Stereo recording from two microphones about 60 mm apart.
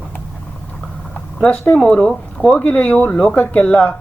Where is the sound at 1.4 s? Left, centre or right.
Centre.